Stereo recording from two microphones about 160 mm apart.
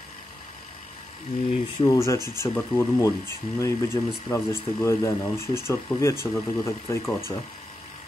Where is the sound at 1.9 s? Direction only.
20° left (ahead or behind).